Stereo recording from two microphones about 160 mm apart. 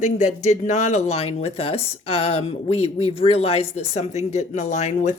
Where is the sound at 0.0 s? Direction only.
45° left (ahead or behind).